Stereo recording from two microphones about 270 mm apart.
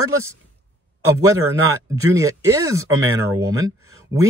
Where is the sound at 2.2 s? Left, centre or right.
Centre.